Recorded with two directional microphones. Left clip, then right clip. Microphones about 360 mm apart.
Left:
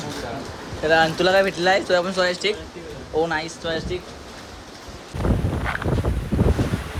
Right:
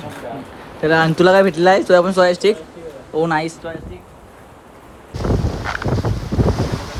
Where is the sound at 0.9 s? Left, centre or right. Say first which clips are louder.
Right 4 dB; centre.